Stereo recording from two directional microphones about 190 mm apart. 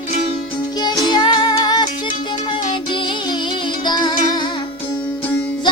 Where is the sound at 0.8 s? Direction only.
20° left (ahead or behind).